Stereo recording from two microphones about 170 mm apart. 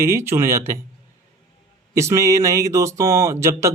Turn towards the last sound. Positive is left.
turn(degrees=-15)  # may be behind; listen again after turning